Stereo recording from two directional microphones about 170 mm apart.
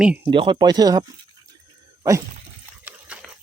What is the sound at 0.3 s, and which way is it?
Speech, 30° right (ahead or behind).